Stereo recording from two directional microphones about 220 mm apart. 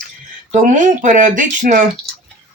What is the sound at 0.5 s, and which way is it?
Speech, 35° right (ahead or behind).